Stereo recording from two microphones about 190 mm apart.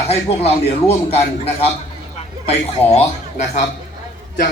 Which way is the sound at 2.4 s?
35° left (ahead or behind).